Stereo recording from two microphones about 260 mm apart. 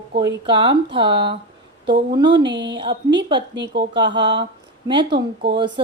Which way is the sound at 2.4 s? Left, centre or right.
Right.